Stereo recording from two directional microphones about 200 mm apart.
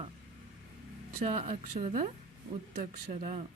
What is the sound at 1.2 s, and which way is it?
Speech, 30° right (ahead or behind).